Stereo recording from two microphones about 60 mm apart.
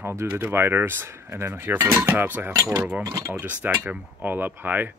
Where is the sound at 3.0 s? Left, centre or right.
Right.